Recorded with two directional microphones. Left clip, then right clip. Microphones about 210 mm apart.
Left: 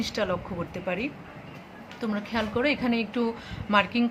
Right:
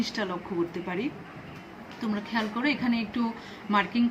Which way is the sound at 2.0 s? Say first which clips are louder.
Left 1 dB; 50° left (ahead or behind).